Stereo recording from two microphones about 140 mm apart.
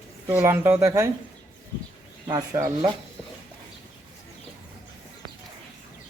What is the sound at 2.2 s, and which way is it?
Speech, 25° right (ahead or behind).